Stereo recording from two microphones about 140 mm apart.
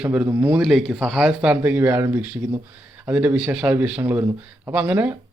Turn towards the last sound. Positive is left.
turn(degrees=-10)  # may be behind; listen again after turning